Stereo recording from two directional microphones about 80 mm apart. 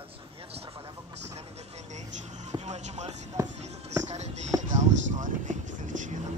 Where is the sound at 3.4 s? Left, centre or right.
Right.